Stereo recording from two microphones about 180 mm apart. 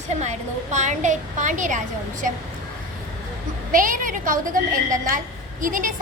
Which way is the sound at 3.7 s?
50° right (ahead or behind).